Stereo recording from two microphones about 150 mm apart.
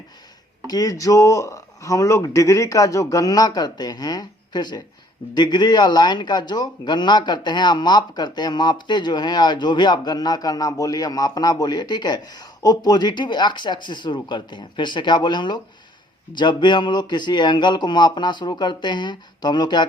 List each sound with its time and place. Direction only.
0.7 s speech: 25° left (ahead or behind)